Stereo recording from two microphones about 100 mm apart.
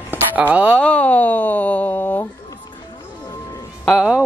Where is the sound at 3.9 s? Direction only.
5° right (ahead or behind).